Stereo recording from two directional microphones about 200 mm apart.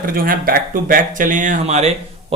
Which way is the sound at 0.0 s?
45° right (ahead or behind).